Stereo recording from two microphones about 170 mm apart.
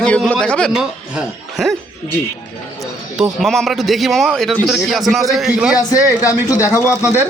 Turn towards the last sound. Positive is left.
turn(degrees=-10)  # may be behind; listen again after turning